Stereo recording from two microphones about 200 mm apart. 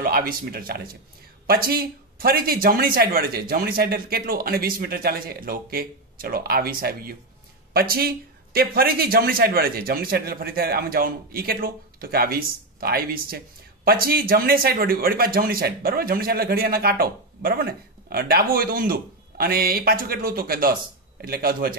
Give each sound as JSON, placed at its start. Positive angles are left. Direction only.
{"t": 0.0, "sound": "a man's voice", "side_deg": -45}